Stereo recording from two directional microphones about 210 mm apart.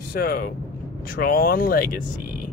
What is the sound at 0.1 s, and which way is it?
Speech, 45° left (ahead or behind).